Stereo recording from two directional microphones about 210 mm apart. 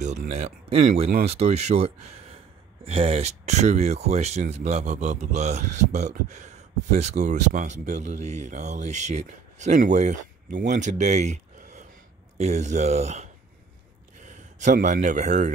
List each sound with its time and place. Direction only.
0.0 s speech: 35° right (ahead or behind)